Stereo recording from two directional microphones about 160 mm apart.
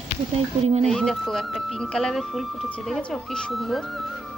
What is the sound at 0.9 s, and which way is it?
Speech, centre (ahead or behind).